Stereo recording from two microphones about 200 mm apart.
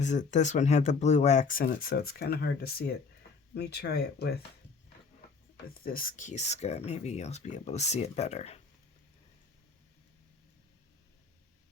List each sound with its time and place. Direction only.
0.0 s speech: 35° left (ahead or behind); by 4.4 s 55° left (ahead or behind)
5.6 s speech: 45° left (ahead or behind)